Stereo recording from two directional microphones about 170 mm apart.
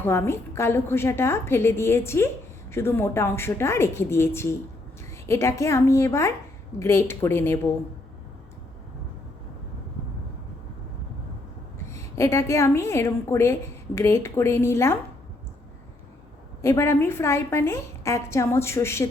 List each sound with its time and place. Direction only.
0.0 s a woman's voice: 15° left (ahead or behind)
11.9 s a woman's voice: 15° left (ahead or behind)
16.6 s a woman's voice: 15° left (ahead or behind)